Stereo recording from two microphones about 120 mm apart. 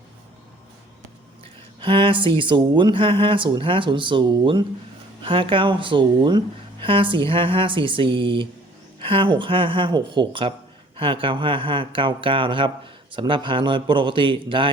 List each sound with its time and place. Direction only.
1.8 s speech: 45° right (ahead or behind)